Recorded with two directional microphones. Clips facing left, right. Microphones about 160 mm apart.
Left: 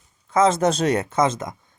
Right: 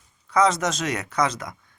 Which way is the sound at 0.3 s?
25° left (ahead or behind).